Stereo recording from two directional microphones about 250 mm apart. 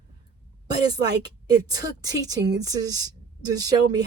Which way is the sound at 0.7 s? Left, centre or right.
Centre.